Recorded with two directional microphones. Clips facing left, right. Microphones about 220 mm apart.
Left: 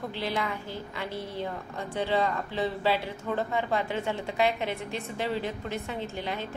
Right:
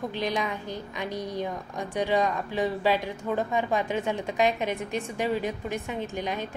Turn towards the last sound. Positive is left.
turn(degrees=-15)  # may be behind; listen again after turning